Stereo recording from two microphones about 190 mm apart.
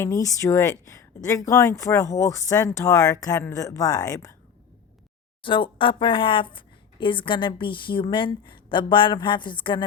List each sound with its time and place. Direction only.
0.0 s speech: 15° left (ahead or behind)
5.4 s speech: 25° left (ahead or behind)